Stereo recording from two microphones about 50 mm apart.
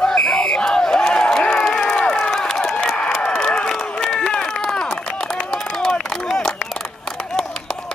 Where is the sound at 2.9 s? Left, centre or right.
Centre.